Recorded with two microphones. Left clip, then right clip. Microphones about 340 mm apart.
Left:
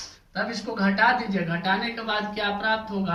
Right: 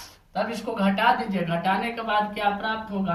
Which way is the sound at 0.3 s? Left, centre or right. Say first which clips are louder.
Right 1 dB; centre.